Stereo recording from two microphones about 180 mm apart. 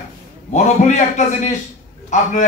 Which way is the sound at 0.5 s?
40° left (ahead or behind).